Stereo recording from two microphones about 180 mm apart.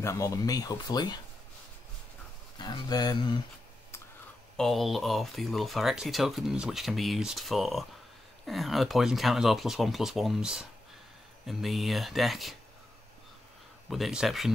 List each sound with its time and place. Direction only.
0.0 s speech: 15° left (ahead or behind)
2.6 s speech: 25° left (ahead or behind)
4.6 s speech: centre (ahead or behind)
13.8 s speech: centre (ahead or behind)